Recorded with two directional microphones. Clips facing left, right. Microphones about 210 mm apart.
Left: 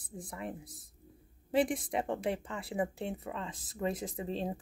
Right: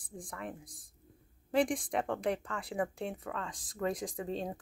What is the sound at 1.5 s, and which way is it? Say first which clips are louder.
Speech: even; 5° left (ahead or behind).